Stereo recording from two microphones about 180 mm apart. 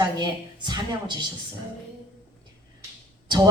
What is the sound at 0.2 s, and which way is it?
Speech, 25° right (ahead or behind).